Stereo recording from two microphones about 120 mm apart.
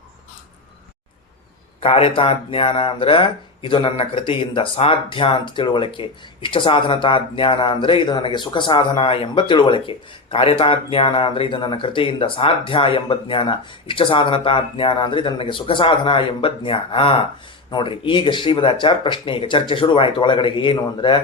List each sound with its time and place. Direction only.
1.8 s speech: 50° left (ahead or behind)